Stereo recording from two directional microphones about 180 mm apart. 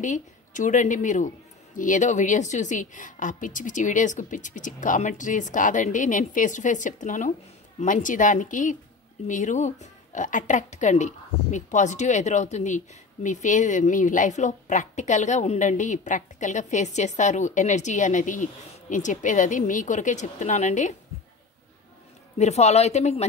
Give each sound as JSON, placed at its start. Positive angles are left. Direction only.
{"t": 0.0, "sound": "speech", "side_deg": 45}
{"t": 22.4, "sound": "speech", "side_deg": 35}